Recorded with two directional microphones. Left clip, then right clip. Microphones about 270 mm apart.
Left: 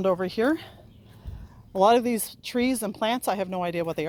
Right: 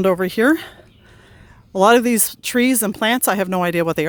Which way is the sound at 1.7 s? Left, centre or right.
Right.